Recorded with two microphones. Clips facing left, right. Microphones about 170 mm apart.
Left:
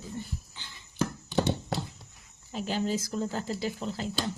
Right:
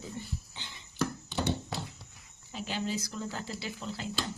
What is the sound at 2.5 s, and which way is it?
Speech, 40° left (ahead or behind).